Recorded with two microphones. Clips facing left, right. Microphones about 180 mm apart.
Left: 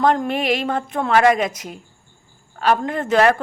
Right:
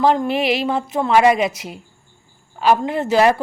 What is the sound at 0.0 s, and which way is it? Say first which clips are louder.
Speech: right 1 dB; 5° right (ahead or behind).